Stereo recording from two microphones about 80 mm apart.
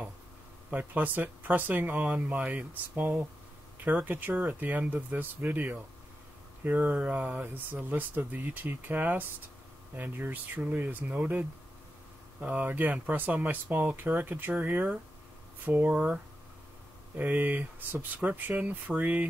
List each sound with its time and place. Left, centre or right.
0.7 s speech: right
17.2 s speech: right